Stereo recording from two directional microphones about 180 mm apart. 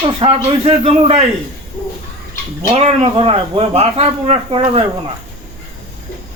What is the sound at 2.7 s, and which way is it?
Speech, 35° right (ahead or behind).